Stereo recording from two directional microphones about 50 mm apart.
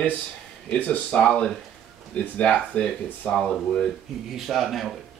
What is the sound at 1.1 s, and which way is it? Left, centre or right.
Speech, centre.